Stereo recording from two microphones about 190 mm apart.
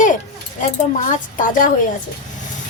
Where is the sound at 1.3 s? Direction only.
45° left (ahead or behind).